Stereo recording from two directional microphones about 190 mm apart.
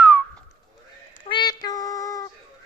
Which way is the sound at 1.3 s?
20° left (ahead or behind).